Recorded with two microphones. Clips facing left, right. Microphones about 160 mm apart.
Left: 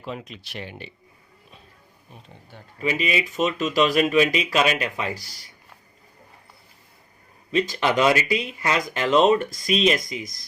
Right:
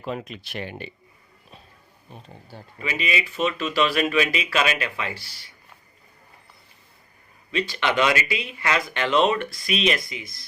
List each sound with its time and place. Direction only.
0.0 s speech: 50° right (ahead or behind)
2.3 s speech: 35° right (ahead or behind)
2.8 s speech: 35° left (ahead or behind)
7.5 s speech: 40° left (ahead or behind)